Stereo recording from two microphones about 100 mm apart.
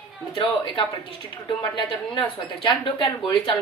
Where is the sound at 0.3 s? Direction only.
55° left (ahead or behind).